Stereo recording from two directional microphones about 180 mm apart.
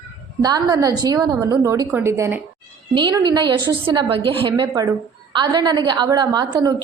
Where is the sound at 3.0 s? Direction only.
25° right (ahead or behind).